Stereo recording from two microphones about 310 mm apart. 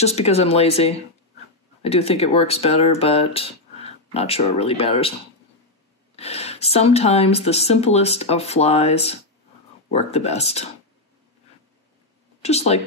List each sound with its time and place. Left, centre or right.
0.0 s speech: centre
6.1 s speech: centre
12.4 s speech: left